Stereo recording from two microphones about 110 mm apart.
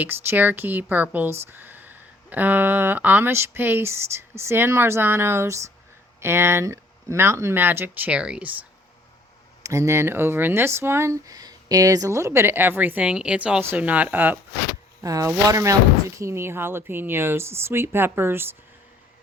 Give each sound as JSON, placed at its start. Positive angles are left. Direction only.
{"t": 0.0, "sound": "speech", "side_deg": -15}
{"t": 9.6, "sound": "speech", "side_deg": -25}
{"t": 15.0, "sound": "speech", "side_deg": -30}